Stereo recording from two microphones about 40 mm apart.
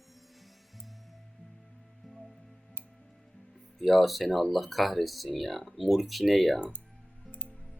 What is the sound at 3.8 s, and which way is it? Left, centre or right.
Speech, centre.